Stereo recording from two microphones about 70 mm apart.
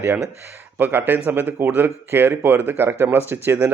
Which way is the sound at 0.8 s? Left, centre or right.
Right.